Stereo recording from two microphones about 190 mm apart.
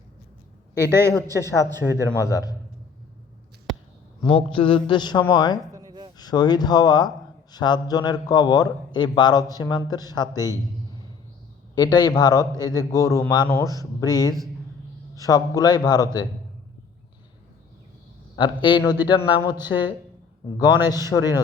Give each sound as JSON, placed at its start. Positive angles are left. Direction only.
{"t": 0.7, "sound": "a man's voice", "side_deg": -15}
{"t": 1.1, "sound": "a man's voice", "side_deg": 15}
{"t": 4.3, "sound": "a man's voice", "side_deg": 30}
{"t": 5.7, "sound": "a sound", "side_deg": -20}
{"t": 6.1, "sound": "a man's voice", "side_deg": 20}
{"t": 11.7, "sound": "a man's voice", "side_deg": 20}
{"t": 18.4, "sound": "a man's voice", "side_deg": 25}